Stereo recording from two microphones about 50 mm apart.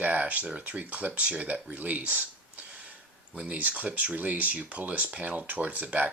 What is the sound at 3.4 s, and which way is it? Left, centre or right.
Speech, right.